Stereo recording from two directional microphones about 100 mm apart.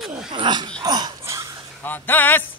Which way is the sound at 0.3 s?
50° right (ahead or behind).